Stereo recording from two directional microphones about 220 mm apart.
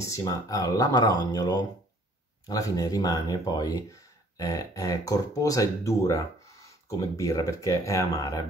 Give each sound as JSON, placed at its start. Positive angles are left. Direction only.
{"t": 0.0, "sound": "speech", "side_deg": 15}